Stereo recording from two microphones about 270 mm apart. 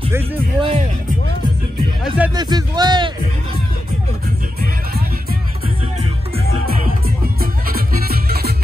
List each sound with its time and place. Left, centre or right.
0.1 s speech: centre
2.1 s a man's voice: centre
7.3 s music: right